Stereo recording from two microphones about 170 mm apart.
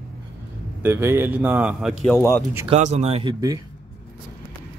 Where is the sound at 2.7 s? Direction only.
40° right (ahead or behind).